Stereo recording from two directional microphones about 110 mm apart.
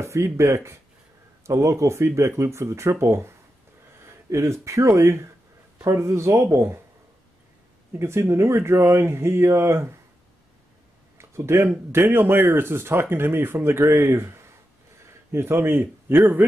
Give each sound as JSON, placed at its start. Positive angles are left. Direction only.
{"t": 0.0, "sound": "speech", "side_deg": -25}
{"t": 7.9, "sound": "speech", "side_deg": -25}
{"t": 11.1, "sound": "a man's voice", "side_deg": -25}